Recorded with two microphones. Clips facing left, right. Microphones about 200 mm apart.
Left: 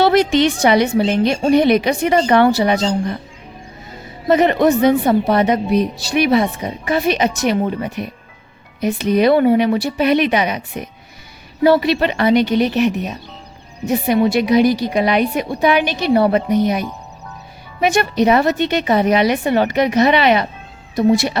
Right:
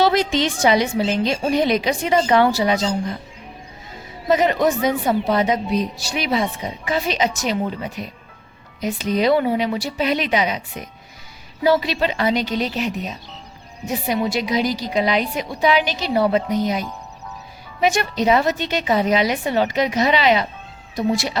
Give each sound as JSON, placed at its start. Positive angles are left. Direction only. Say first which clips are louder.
{"t": 0.0, "sound": "a woman's voice", "louder": "left 5 dB", "side_deg": 65}
{"t": 4.3, "sound": "a woman's voice", "louder": "left 4 dB", "side_deg": 60}